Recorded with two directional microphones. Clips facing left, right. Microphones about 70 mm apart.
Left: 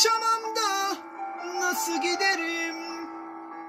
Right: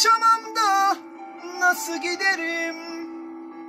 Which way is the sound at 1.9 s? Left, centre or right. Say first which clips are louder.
Right 1 dB; right.